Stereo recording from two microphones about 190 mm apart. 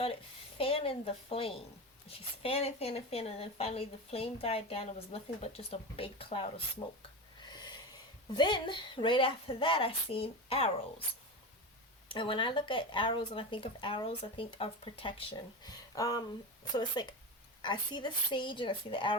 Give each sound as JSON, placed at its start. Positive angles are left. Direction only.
{"t": 0.6, "sound": "speech", "side_deg": 30}
{"t": 7.4, "sound": "a sound", "side_deg": 20}
{"t": 8.3, "sound": "speech", "side_deg": 25}
{"t": 12.1, "sound": "speech", "side_deg": 25}